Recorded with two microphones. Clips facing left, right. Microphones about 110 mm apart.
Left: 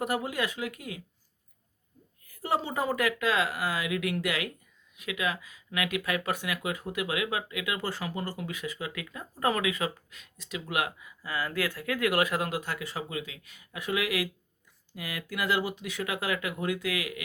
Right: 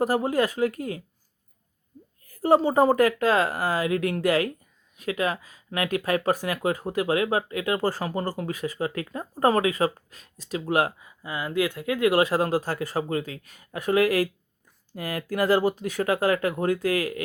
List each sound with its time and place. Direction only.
0.0 s speech: 35° right (ahead or behind)
2.2 s speech: 40° right (ahead or behind)
11.2 s speech: 20° right (ahead or behind); by 17.2 s 40° right (ahead or behind)